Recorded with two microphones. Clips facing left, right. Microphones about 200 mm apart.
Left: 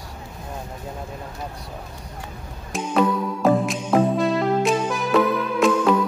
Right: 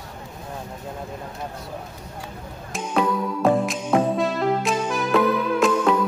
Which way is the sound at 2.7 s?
Centre (ahead or behind).